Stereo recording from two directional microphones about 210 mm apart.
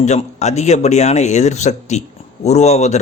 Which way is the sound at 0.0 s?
35° left (ahead or behind).